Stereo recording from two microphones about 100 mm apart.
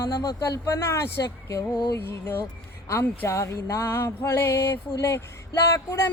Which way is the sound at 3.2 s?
25° left (ahead or behind).